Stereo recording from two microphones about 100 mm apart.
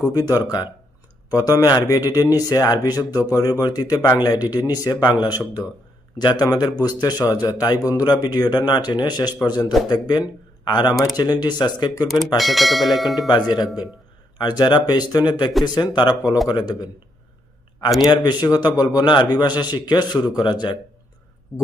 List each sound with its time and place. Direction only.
0.1 s a man's voice: 40° left (ahead or behind)
12.4 s speech: centre (ahead or behind)
13.3 s a man's voice: 45° left (ahead or behind)
18.0 s a man's voice: 45° left (ahead or behind)